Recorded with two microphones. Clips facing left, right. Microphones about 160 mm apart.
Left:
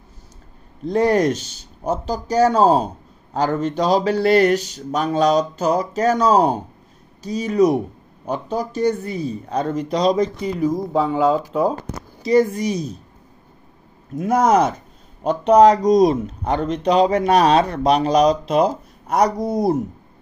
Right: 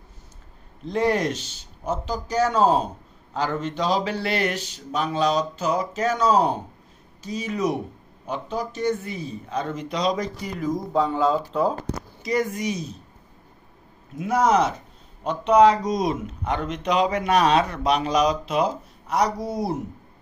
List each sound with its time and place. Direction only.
0.8 s speech: 40° left (ahead or behind)
10.9 s speech: 5° left (ahead or behind)
12.2 s speech: 30° left (ahead or behind)
14.1 s speech: 45° left (ahead or behind)